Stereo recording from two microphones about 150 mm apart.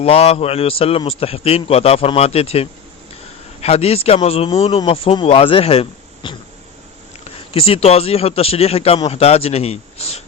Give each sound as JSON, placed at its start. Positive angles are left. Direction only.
{"t": 0.0, "sound": "a man's voice", "side_deg": 40}